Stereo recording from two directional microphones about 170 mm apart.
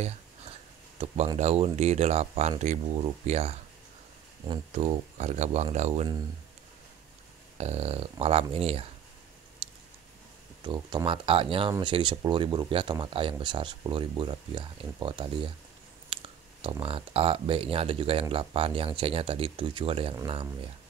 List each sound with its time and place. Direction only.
0.9 s speech: 35° right (ahead or behind)
7.5 s speech: 40° right (ahead or behind)
9.6 s a sound: 30° right (ahead or behind)
10.6 s speech: 25° right (ahead or behind)